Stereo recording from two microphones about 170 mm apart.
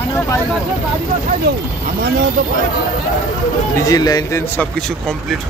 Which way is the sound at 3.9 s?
20° left (ahead or behind).